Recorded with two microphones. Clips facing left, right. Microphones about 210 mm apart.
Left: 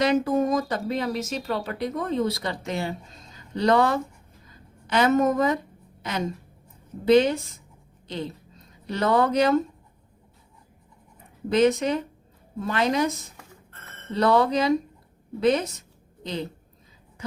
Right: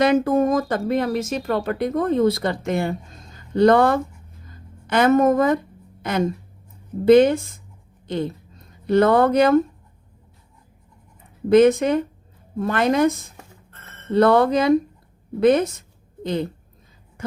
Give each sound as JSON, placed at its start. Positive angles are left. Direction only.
{"t": 0.0, "sound": "a woman's voice", "side_deg": -55}
{"t": 11.4, "sound": "a woman's voice", "side_deg": -55}